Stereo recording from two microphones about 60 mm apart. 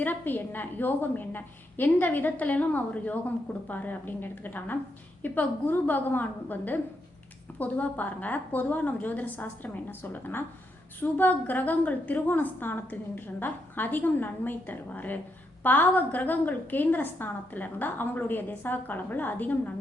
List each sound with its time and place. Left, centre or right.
0.0 s a woman's voice: left